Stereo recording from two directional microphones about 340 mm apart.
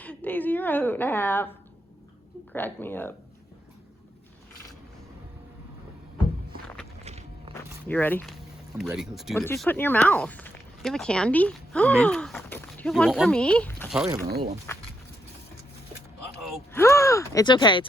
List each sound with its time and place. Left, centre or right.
0.0 s a woman's voice: centre
2.5 s speech: centre
7.0 s walk: centre
7.9 s speech: centre
14.3 s speech: right
16.4 s speech: centre